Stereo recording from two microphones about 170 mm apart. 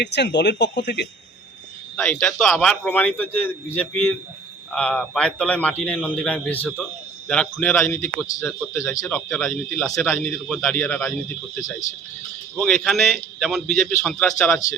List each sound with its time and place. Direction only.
0.0 s speech: 85° left
2.0 s a man's voice: 5° left (ahead or behind)
9.1 s a man's voice: 5° left (ahead or behind)
12.5 s a man's voice: 5° left (ahead or behind)